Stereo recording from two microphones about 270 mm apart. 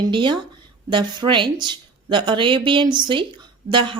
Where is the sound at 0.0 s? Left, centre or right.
Centre.